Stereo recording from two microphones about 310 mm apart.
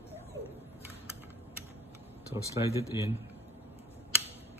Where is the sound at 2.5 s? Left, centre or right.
Centre.